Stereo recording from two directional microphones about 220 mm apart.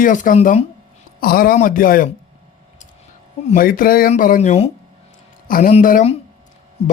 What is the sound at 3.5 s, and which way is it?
A man's voice, 40° left (ahead or behind).